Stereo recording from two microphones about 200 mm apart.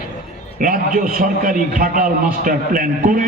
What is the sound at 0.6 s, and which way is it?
A man's voice, 45° right (ahead or behind).